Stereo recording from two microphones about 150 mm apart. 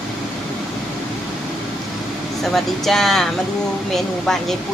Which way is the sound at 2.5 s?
Centre (ahead or behind).